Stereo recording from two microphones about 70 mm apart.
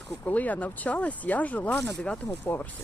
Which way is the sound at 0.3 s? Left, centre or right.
Left.